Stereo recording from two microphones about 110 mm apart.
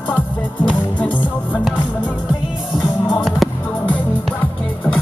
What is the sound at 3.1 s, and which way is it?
Music, centre (ahead or behind).